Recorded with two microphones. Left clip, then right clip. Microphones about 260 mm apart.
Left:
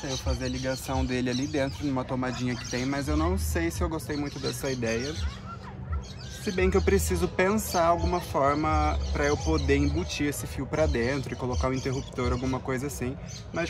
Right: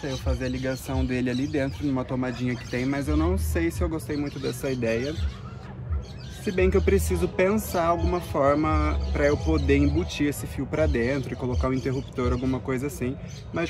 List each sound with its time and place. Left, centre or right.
0.3 s speech: centre
6.4 s speech: centre